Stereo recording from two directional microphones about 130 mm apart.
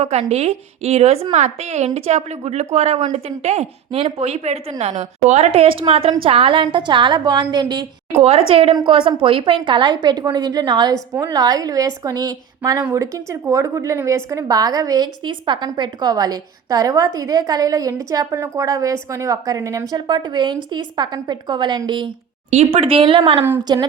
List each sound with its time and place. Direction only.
0.0 s a woman's voice: 55° right (ahead or behind)
5.5 s a woman's voice: 45° right (ahead or behind)
8.2 s a woman's voice: 50° right (ahead or behind); by 12.8 s 30° right (ahead or behind)
12.8 s a woman's voice: 20° right (ahead or behind)
19.9 s a woman's voice: 35° right (ahead or behind)
22.4 s a woman's voice: 50° right (ahead or behind); by 23.8 s 35° right (ahead or behind)